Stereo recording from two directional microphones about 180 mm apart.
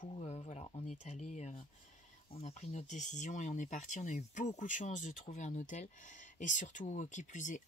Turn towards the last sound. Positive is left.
turn(degrees=45)  # may be behind; listen again after turning